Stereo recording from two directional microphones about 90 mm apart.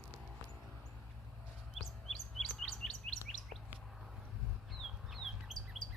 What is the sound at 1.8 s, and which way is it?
Chirp, centre (ahead or behind).